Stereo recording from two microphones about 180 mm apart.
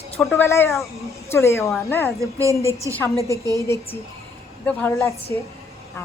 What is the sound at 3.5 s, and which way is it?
A man's voice, 15° left (ahead or behind).